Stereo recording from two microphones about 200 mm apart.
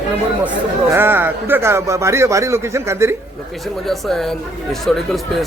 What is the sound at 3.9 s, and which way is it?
Speech, centre (ahead or behind).